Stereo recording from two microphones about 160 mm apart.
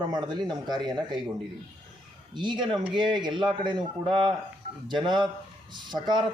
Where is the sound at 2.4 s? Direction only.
30° right (ahead or behind).